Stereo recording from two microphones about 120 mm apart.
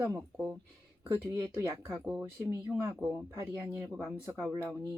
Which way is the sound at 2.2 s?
25° right (ahead or behind).